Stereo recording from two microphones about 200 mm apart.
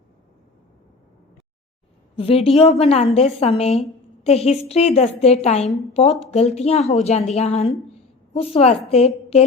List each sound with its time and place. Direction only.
2.1 s a woman's voice: 30° left (ahead or behind)